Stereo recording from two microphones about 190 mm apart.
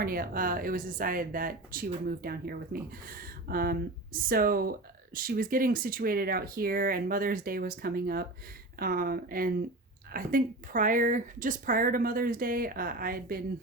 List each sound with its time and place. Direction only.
0.0 s speech: 50° right (ahead or behind)